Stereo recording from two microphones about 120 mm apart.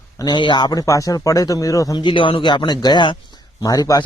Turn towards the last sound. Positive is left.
turn(degrees=30)  # may be behind; listen again after turning